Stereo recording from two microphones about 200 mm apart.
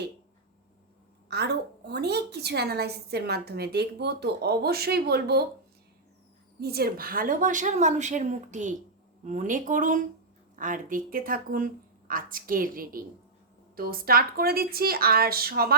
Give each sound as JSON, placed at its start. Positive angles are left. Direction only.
{"t": 1.3, "sound": "a woman's voice", "side_deg": -55}
{"t": 6.6, "sound": "a woman's voice", "side_deg": -50}